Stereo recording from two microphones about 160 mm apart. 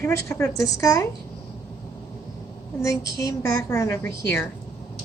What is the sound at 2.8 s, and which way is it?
Speech, 20° left (ahead or behind).